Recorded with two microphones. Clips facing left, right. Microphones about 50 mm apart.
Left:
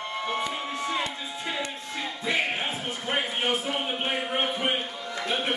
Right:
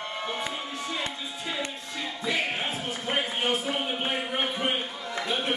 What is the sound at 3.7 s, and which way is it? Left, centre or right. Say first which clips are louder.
Music: even; centre.